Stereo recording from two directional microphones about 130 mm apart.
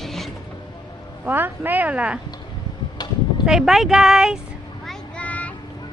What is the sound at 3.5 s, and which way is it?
Speech, 5° right (ahead or behind).